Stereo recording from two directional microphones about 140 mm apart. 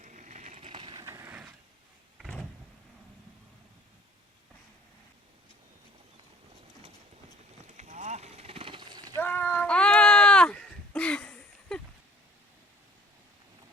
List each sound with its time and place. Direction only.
0.0 s a sound: 60° right (ahead or behind)
0.7 s vehicle: 35° right (ahead or behind)
1.0 s mechanisms: 20° right (ahead or behind)
2.1 s vehicle: centre (ahead or behind)
7.8 s a sound: 55° right (ahead or behind); by 9.1 s 30° right (ahead or behind)
9.1 s sheep: 15° left (ahead or behind)